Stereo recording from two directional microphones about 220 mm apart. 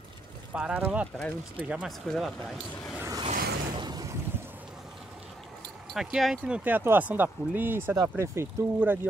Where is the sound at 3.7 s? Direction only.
20° right (ahead or behind).